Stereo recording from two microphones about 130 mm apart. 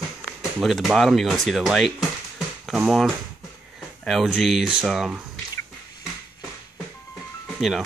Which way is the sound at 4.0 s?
Centre (ahead or behind).